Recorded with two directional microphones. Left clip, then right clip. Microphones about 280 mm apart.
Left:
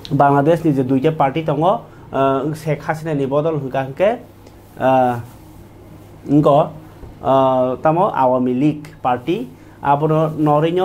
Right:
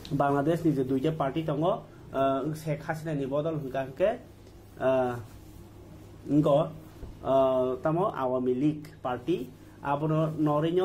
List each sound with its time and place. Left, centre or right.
0.0 s speech: left
6.2 s speech: left